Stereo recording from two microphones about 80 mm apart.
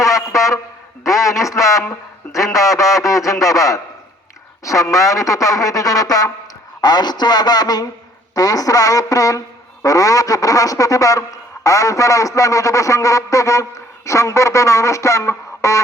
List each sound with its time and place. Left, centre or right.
0.0 s a sound: left
1.0 s a man's voice: left
6.8 s a man's voice: left